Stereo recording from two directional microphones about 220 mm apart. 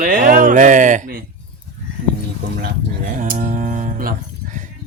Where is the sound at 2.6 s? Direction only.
40° right (ahead or behind).